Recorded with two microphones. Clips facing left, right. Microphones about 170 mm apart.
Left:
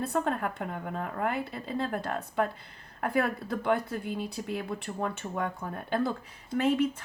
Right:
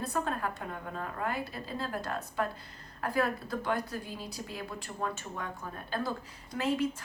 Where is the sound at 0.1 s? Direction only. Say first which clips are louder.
Left 4 dB; 60° left (ahead or behind).